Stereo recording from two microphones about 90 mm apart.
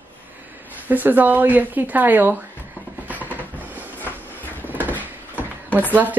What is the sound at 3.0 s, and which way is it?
Train, 20° right (ahead or behind).